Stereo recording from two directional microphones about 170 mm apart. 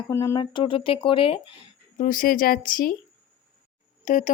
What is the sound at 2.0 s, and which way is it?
Speech, 50° left (ahead or behind).